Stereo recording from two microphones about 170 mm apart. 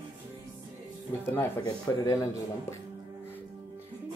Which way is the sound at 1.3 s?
15° left (ahead or behind).